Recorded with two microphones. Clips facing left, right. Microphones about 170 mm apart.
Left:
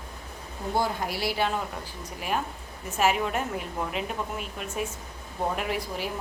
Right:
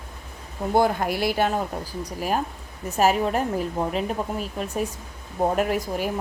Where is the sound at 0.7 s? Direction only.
55° right (ahead or behind).